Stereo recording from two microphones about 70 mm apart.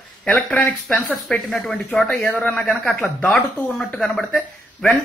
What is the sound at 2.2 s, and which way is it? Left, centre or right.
Speech, centre.